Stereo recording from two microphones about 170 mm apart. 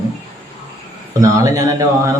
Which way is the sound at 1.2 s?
20° right (ahead or behind).